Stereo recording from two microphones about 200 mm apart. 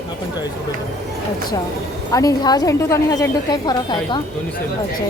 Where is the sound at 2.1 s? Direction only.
20° left (ahead or behind).